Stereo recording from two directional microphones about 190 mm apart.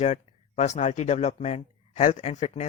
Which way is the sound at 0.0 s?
35° left (ahead or behind).